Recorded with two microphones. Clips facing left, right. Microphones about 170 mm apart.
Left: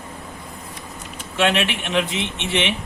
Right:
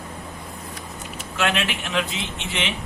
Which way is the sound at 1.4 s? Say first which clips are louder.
Left 4 dB; 25° left (ahead or behind).